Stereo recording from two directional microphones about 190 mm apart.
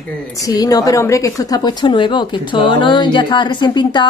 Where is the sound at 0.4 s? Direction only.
20° left (ahead or behind).